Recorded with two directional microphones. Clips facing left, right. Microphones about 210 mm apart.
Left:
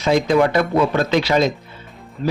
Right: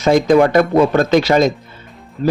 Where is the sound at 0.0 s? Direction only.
45° right (ahead or behind).